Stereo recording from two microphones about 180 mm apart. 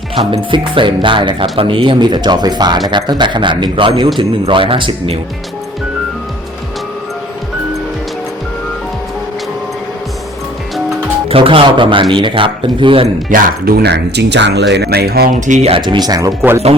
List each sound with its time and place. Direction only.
0.2 s speech: 30° right (ahead or behind)
11.3 s speech: 30° right (ahead or behind)
13.3 s speech: 55° right (ahead or behind)
15.4 s speech: 45° right (ahead or behind); by 16.6 s 10° right (ahead or behind)